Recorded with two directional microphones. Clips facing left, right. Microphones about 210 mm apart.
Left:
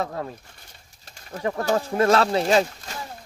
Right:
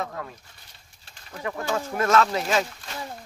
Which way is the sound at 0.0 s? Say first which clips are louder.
Left 4 dB; 35° left (ahead or behind).